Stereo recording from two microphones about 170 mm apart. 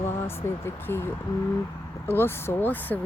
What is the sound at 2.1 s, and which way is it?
Speech, 15° left (ahead or behind).